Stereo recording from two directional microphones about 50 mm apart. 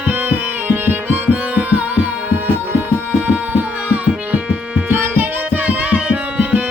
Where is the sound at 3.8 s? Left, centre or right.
Right.